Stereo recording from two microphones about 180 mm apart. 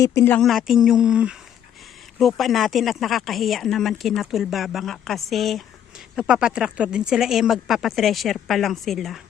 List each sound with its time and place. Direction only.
0.0 s speech: 15° left (ahead or behind)
0.3 s speech: centre (ahead or behind)